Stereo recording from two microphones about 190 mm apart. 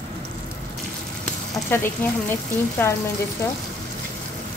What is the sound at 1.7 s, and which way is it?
Speech, 10° left (ahead or behind).